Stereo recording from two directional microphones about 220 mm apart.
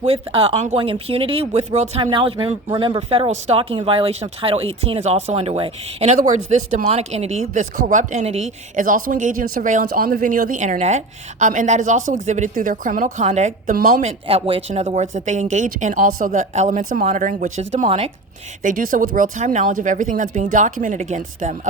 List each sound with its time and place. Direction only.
0.0 s a woman's voice: 25° right (ahead or behind)
14.3 s a woman's voice: 25° right (ahead or behind)
18.6 s a woman's voice: 40° right (ahead or behind)